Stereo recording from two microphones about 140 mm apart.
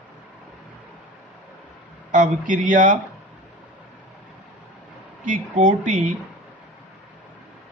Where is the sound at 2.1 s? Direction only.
70° right (ahead or behind).